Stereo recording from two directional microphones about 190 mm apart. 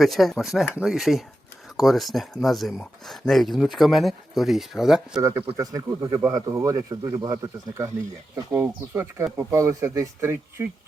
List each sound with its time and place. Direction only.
0.0 s speech: centre (ahead or behind)
5.2 s speech: 15° right (ahead or behind)